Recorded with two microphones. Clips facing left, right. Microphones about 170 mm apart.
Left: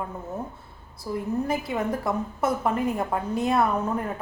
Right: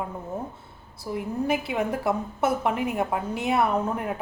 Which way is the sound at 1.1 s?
15° right (ahead or behind).